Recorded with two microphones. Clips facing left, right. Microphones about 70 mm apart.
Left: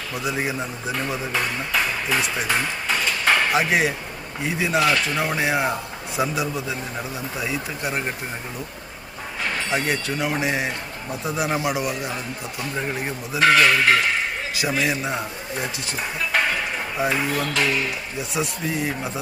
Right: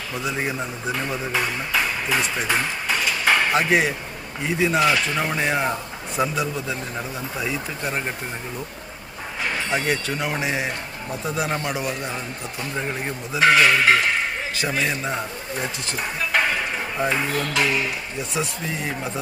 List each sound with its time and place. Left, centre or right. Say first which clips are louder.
0.1 s speech: left 1 dB; centre
9.6 s speech: even; centre